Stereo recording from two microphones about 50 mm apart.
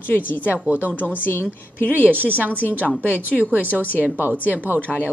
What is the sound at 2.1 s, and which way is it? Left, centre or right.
Speech, right.